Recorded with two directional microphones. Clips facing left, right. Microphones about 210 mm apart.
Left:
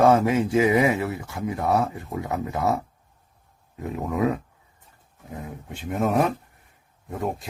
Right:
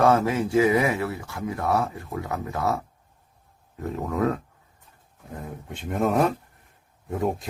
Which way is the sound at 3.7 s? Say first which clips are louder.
Left 1 dB; 15° left (ahead or behind).